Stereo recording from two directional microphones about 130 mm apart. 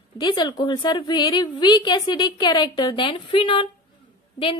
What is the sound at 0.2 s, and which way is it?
Speech, 35° left (ahead or behind).